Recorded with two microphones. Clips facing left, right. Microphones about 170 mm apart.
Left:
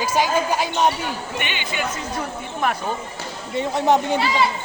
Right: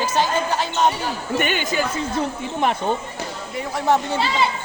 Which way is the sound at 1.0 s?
45° right (ahead or behind).